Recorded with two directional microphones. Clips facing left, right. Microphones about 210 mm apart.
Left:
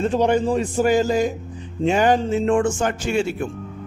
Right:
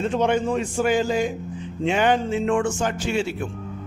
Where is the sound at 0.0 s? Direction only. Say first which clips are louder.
Left 3 dB; 35° left (ahead or behind).